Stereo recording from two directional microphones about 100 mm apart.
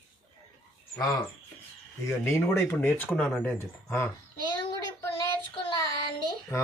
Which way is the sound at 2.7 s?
20° left (ahead or behind).